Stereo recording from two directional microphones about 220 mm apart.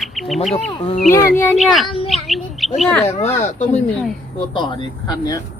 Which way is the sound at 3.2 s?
30° left (ahead or behind).